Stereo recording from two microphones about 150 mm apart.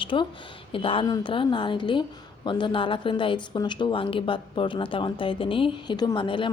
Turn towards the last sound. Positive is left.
turn(degrees=35)  # may be behind; listen again after turning